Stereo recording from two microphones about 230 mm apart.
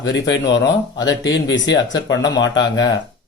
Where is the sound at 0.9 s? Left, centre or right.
Centre.